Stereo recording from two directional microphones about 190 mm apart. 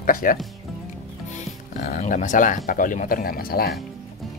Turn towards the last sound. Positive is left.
turn(degrees=50)  # may be behind; listen again after turning